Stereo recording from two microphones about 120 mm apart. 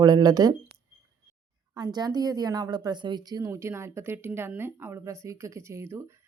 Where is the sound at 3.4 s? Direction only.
20° right (ahead or behind).